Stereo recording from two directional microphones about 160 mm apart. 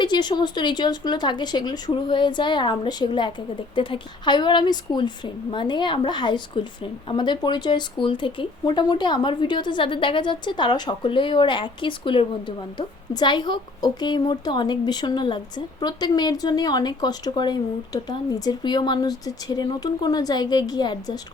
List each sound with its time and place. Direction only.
0.0 s speech: 25° left (ahead or behind)